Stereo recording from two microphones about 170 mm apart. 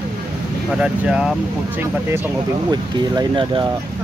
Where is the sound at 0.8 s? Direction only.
5° right (ahead or behind).